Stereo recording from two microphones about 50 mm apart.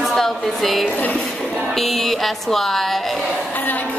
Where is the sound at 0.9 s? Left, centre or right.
Left.